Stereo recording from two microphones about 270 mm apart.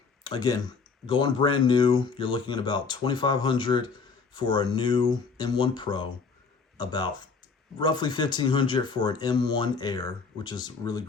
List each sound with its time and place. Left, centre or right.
0.3 s speech: centre